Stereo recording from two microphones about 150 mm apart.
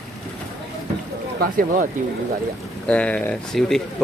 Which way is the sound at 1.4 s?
70° right (ahead or behind).